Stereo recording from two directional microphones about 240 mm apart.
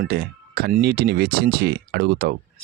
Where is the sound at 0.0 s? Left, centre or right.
Right.